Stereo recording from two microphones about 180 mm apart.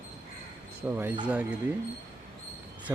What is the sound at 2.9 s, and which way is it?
Speech, 15° right (ahead or behind).